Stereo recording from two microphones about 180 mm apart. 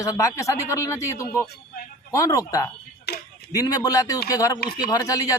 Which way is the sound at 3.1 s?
65° left (ahead or behind).